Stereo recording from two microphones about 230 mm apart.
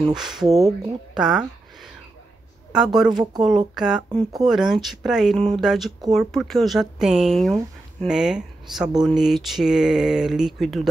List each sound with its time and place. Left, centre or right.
0.1 s speech: centre
3.1 s speech: centre
3.4 s speech: centre